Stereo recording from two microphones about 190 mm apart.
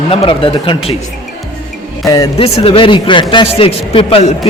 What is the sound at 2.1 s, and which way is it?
A man's voice, 20° left (ahead or behind).